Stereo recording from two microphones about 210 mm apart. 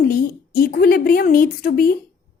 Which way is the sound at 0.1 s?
40° left (ahead or behind).